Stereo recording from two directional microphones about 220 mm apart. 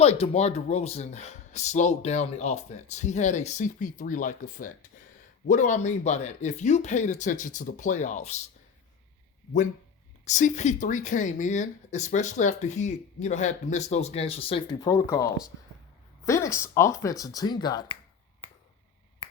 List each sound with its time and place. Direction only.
0.0 s speech: 30° left (ahead or behind)
10.2 s speech: 35° left (ahead or behind)